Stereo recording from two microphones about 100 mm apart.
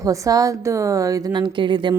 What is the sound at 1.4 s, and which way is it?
Speech, 50° right (ahead or behind).